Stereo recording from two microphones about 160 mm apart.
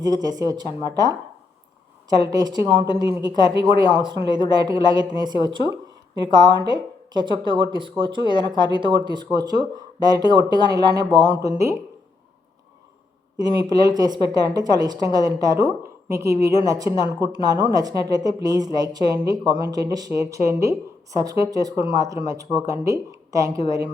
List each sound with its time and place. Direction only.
0.0 s speech: 25° right (ahead or behind)
2.2 s speech: 25° right (ahead or behind)
11.5 s speech: 20° right (ahead or behind)
13.4 s speech: 25° right (ahead or behind)